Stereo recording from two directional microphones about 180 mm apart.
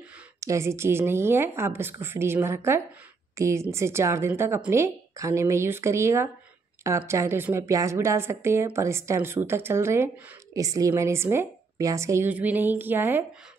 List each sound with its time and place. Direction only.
0.4 s a woman's voice: 15° right (ahead or behind)